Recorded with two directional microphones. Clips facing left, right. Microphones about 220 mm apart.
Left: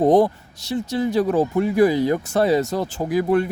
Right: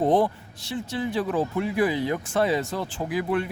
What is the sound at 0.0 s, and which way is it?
Speech, 40° left (ahead or behind).